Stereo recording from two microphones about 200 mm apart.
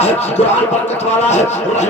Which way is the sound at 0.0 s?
30° left (ahead or behind).